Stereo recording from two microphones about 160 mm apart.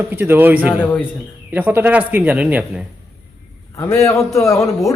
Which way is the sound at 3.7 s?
15° left (ahead or behind).